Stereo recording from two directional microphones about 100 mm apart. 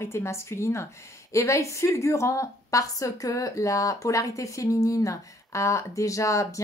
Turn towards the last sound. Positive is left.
turn(degrees=30)  # may be behind; listen again after turning